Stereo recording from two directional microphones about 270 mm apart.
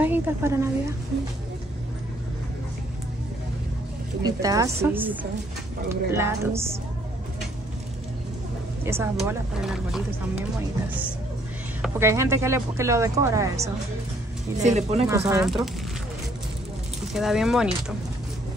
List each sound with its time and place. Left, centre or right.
0.0 s a woman's voice: centre
4.2 s speech: centre
8.8 s speech: centre
11.8 s speech: centre
14.6 s speech: right
15.0 s speech: centre
17.1 s speech: centre